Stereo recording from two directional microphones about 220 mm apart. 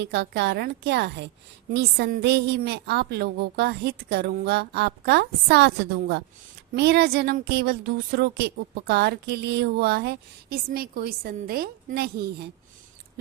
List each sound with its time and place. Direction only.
0.0 s a woman's voice: 50° right (ahead or behind)